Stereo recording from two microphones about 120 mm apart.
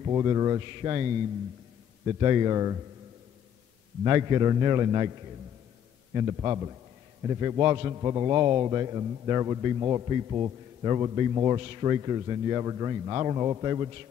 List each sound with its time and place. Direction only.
0.0 s a man's voice: 35° right (ahead or behind)
2.1 s a man's voice: 35° right (ahead or behind)
4.0 s a man's voice: 35° right (ahead or behind)
6.1 s a man's voice: 35° right (ahead or behind)